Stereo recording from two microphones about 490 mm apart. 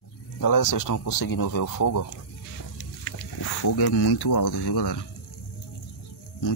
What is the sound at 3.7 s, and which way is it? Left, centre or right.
Speech, left.